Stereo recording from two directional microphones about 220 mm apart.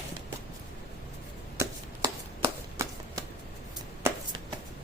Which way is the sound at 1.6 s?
15° right (ahead or behind).